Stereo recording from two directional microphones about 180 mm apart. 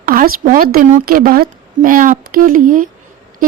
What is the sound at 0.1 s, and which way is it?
A woman's voice, 50° right (ahead or behind).